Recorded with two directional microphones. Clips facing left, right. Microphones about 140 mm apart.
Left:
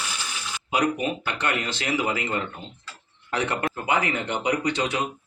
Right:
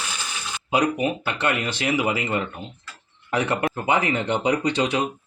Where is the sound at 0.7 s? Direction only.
25° right (ahead or behind).